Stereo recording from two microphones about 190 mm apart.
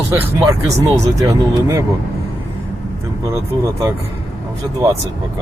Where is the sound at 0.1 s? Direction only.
15° right (ahead or behind).